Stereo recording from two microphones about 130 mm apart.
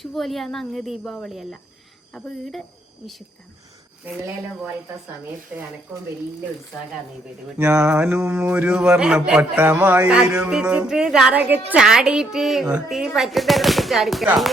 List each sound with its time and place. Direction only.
0.0 s a woman's voice: centre (ahead or behind)
5.5 s a man's voice: 10° right (ahead or behind)
7.8 s a man's voice: 15° right (ahead or behind); by 14.3 s centre (ahead or behind)